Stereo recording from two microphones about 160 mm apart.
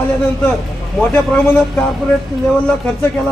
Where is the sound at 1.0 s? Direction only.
5° left (ahead or behind).